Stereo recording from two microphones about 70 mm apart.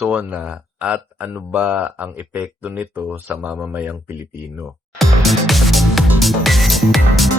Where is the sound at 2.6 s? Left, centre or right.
Right.